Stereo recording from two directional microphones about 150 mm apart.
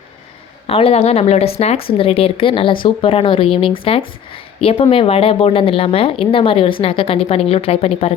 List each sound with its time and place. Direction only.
0.7 s a woman's voice: 40° left (ahead or behind)